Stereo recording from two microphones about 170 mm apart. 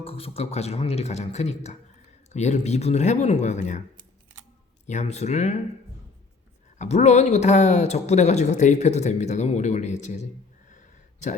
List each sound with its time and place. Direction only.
0.0 s speech: 35° left (ahead or behind)
4.9 s speech: 45° left (ahead or behind)
6.7 s speech: 40° left (ahead or behind)
10.7 s a sound: 45° left (ahead or behind)